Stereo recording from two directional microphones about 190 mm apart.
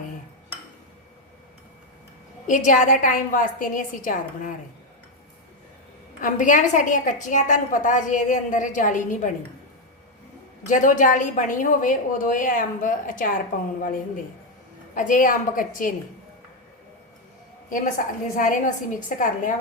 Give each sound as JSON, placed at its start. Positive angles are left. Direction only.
{"t": 2.5, "sound": "a woman's voice", "side_deg": 40}
{"t": 6.1, "sound": "a woman's voice", "side_deg": 45}
{"t": 10.7, "sound": "a woman's voice", "side_deg": 40}
{"t": 14.9, "sound": "a woman's voice", "side_deg": 45}
{"t": 17.7, "sound": "a woman's voice", "side_deg": 45}